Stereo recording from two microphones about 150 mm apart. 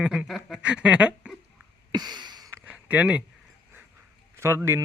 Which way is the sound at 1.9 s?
25° right (ahead or behind).